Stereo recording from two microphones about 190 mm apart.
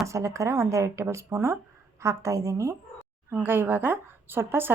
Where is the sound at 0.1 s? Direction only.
15° right (ahead or behind).